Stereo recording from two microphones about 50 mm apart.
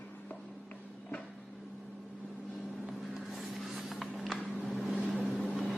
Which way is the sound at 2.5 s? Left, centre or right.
Centre.